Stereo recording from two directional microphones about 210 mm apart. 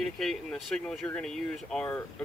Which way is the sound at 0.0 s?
Centre (ahead or behind).